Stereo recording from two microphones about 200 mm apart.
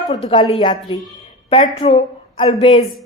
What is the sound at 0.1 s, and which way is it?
Speech, 25° left (ahead or behind).